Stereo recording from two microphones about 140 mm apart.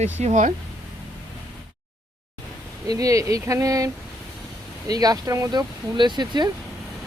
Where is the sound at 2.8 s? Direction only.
25° right (ahead or behind).